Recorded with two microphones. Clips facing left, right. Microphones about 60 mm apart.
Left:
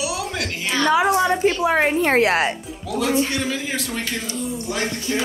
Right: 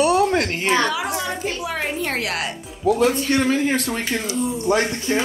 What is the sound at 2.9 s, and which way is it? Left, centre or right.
Speech, right.